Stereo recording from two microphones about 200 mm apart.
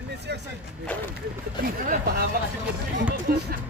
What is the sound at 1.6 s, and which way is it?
Speech, 45° right (ahead or behind).